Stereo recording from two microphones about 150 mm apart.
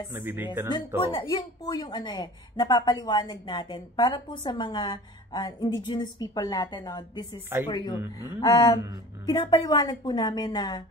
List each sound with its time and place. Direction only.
0.1 s speech: 15° right (ahead or behind)
0.7 s a woman's voice: 35° left (ahead or behind)